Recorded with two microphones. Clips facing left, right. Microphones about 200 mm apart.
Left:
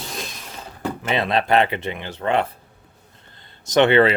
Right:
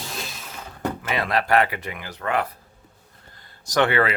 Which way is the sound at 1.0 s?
25° left (ahead or behind).